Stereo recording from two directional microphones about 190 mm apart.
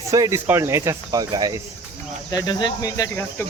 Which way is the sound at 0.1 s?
15° right (ahead or behind).